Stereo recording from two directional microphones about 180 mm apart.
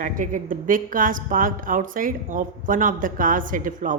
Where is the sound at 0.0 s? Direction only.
45° right (ahead or behind).